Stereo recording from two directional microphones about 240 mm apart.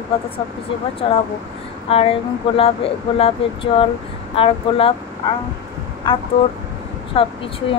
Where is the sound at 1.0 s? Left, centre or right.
Left.